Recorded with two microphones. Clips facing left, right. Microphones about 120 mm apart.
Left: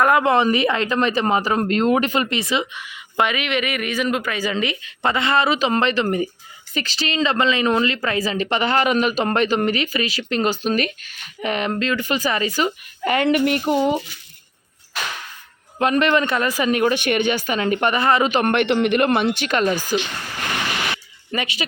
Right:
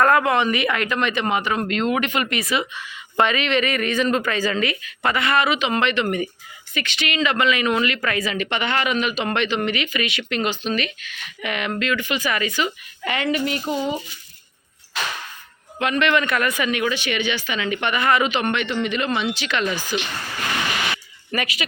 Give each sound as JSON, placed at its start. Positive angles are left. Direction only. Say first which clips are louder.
{"t": 0.0, "sound": "speech", "louder": "even", "side_deg": 15}
{"t": 0.3, "sound": "speech", "louder": "left 3 dB", "side_deg": 30}
{"t": 13.2, "sound": "speech", "louder": "left 4 dB", "side_deg": 55}
{"t": 15.8, "sound": "speech", "louder": "left 3 dB", "side_deg": 40}
{"t": 21.3, "sound": "speech", "louder": "even", "side_deg": 25}